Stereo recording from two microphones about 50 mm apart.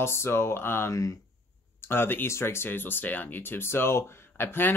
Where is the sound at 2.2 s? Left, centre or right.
Left.